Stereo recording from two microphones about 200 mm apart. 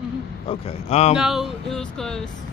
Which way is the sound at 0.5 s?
30° left (ahead or behind).